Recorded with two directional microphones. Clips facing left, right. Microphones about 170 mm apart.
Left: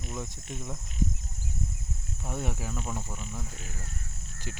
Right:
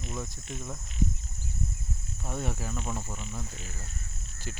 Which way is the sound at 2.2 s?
10° left (ahead or behind).